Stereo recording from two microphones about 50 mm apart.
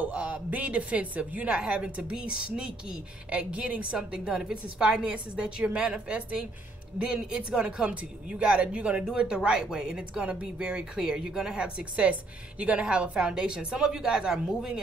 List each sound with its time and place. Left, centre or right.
0.0 s speech: right
4.3 s speech: centre